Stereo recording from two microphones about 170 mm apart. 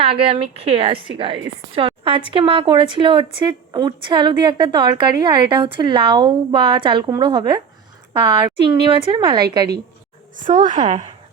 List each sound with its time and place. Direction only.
0.0 s a woman's voice: 35° right (ahead or behind)
8.6 s a woman's voice: 30° right (ahead or behind)
10.4 s a woman's voice: 50° right (ahead or behind)